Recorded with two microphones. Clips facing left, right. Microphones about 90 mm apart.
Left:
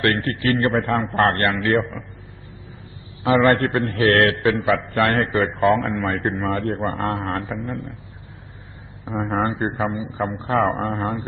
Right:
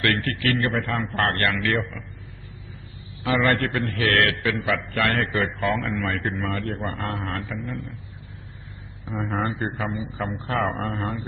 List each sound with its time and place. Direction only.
0.0 s a man's voice: 30° left (ahead or behind)
3.2 s a man's voice: 35° left (ahead or behind)
9.0 s a man's voice: 40° left (ahead or behind)